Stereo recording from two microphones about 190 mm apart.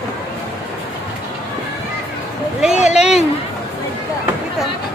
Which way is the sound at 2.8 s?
35° left (ahead or behind).